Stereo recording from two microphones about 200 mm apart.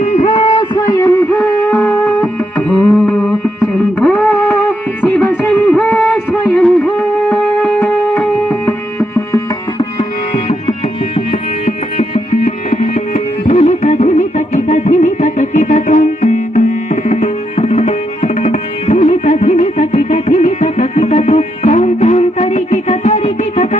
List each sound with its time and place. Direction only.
0.0 s music: 35° left (ahead or behind); by 1.4 s 15° left (ahead or behind)
1.4 s music: 5° left (ahead or behind)
10.0 s tabla: 30° left (ahead or behind)
11.6 s music: 35° left (ahead or behind)
16.9 s tabla: 35° left (ahead or behind)